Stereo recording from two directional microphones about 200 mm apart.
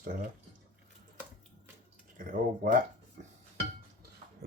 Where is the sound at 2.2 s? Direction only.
45° right (ahead or behind).